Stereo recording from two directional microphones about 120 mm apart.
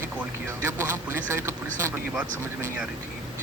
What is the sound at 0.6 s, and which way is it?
Speech, 20° right (ahead or behind).